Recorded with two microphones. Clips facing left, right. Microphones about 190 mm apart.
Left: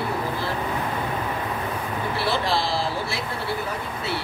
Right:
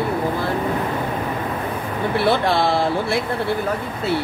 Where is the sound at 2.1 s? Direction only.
55° right (ahead or behind).